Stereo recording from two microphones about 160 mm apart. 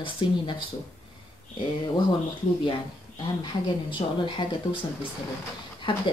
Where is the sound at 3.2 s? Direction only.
30° left (ahead or behind).